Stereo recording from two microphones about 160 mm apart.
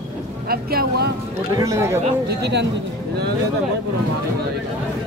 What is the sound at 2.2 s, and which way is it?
Speech, 90° right.